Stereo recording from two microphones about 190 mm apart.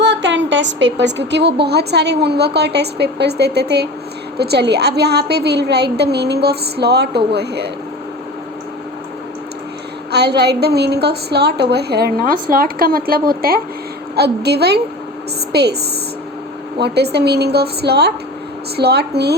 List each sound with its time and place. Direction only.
0.0 s a woman's voice: 65° right (ahead or behind)
10.1 s a woman's voice: 60° right (ahead or behind)
16.8 s a woman's voice: 60° right (ahead or behind)